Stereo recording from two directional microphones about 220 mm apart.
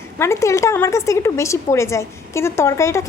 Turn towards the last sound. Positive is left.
turn(degrees=15)  # may be behind; listen again after turning